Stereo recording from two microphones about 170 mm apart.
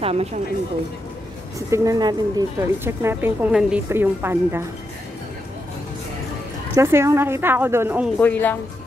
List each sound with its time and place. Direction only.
0.0 s speech: 35° right (ahead or behind)
1.7 s a woman's voice: 20° right (ahead or behind)
6.7 s a woman's voice: 15° right (ahead or behind)
8.2 s speech: 10° left (ahead or behind)